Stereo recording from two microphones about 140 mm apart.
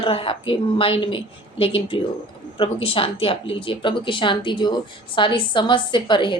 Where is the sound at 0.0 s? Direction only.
40° left (ahead or behind).